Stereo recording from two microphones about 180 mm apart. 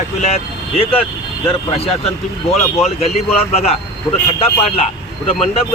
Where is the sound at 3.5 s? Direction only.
35° left (ahead or behind).